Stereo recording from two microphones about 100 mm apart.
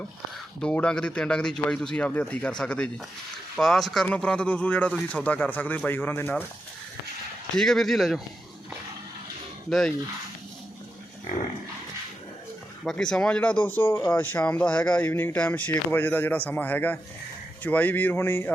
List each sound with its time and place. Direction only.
0.6 s speech: 10° left (ahead or behind)
7.5 s speech: 5° left (ahead or behind)
9.6 s speech: 5° left (ahead or behind)
12.8 s speech: 5° left (ahead or behind); by 18.5 s 25° left (ahead or behind)